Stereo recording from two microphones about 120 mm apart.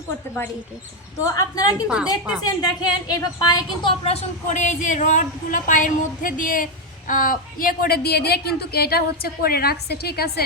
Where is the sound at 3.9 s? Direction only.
55° left (ahead or behind).